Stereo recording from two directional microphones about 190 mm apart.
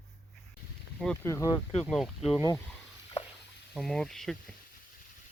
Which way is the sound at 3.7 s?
Centre (ahead or behind).